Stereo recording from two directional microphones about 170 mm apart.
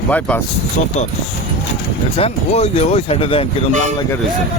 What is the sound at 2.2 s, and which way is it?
Speech, 35° left (ahead or behind).